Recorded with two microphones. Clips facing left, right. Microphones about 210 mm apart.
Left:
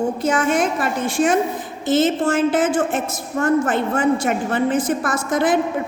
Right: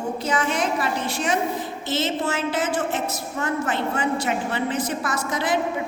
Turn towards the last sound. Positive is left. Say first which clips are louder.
# left 6 dB
turn(degrees=50)  # may be behind; listen again after turning